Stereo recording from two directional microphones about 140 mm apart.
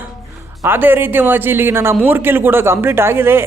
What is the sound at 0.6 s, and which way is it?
Speech, 15° right (ahead or behind).